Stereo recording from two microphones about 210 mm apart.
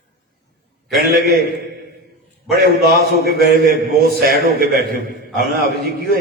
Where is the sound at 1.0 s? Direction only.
50° right (ahead or behind).